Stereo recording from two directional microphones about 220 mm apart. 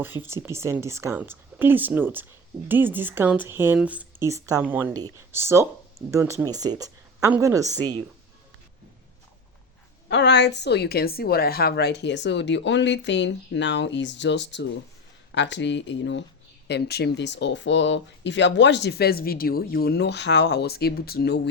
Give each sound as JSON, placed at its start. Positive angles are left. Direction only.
{"t": 0.0, "sound": "speech", "side_deg": -10}
{"t": 10.1, "sound": "speech", "side_deg": 50}